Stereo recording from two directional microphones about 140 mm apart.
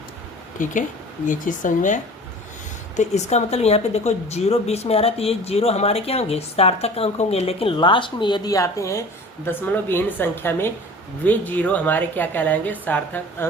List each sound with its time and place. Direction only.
0.6 s speech: 65° left (ahead or behind)
2.9 s a woman's voice: 55° left (ahead or behind); by 13.5 s 15° left (ahead or behind)